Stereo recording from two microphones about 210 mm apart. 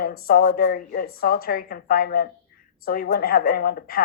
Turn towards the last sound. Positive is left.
turn(degrees=45)  # may be behind; listen again after turning